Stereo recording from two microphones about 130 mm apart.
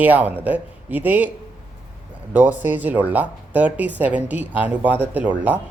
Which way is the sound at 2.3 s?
15° right (ahead or behind).